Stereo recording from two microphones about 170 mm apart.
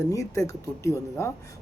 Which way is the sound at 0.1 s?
20° left (ahead or behind).